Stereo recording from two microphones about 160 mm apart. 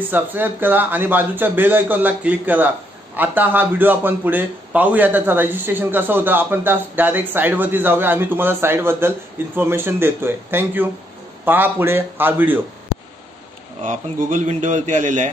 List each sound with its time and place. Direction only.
0.1 s a man's voice: 10° right (ahead or behind)
13.8 s a man's voice: 50° right (ahead or behind)